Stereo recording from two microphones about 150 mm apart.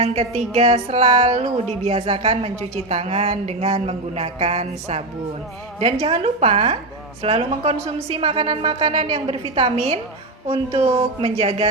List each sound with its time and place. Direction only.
0.0 s a woman's voice: 45° right (ahead or behind)